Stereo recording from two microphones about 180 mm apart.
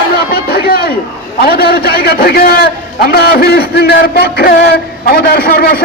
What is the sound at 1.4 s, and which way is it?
A man's voice, 60° left (ahead or behind).